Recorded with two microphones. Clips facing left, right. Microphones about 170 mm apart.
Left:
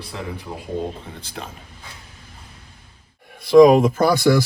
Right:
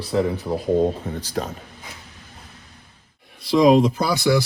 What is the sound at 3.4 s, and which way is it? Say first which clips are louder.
Speech: left 4 dB; 50° left (ahead or behind).